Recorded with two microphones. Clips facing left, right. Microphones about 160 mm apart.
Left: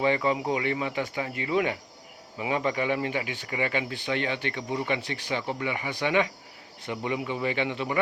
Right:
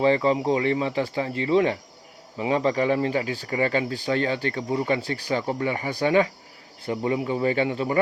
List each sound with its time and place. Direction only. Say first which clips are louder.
0.0 s speech: right 5 dB; 35° right (ahead or behind)